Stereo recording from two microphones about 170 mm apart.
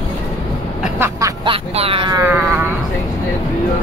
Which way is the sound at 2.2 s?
10° right (ahead or behind).